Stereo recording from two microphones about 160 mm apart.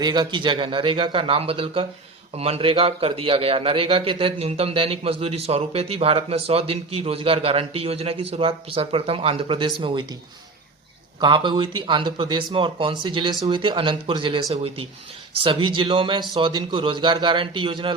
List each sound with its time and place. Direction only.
0.0 s a man's voice: 25° right (ahead or behind)
11.2 s a man's voice: 30° right (ahead or behind)